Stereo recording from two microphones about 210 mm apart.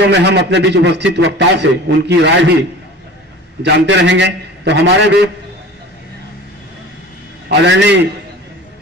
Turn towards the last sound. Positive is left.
turn(degrees=-55)  # may be behind; listen again after turning